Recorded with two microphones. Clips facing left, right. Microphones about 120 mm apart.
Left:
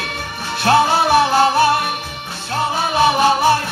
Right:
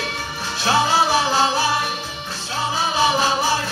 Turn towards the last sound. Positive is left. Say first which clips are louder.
# left 6 dB
turn(degrees=55)  # may be behind; listen again after turning